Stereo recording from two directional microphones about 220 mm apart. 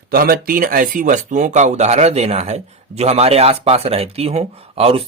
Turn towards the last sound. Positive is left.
turn(degrees=-25)  # may be behind; listen again after turning